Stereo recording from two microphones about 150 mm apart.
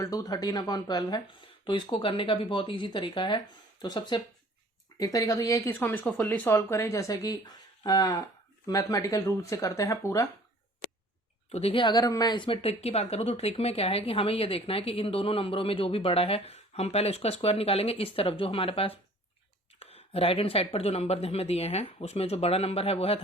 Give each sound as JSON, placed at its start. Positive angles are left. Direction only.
{"t": 0.0, "sound": "speech", "side_deg": 25}
{"t": 11.5, "sound": "speech", "side_deg": 40}